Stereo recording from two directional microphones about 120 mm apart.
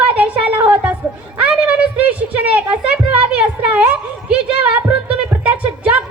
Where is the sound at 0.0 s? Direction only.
10° right (ahead or behind).